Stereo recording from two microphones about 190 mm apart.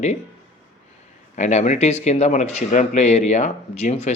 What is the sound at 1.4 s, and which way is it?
Speech, 40° left (ahead or behind).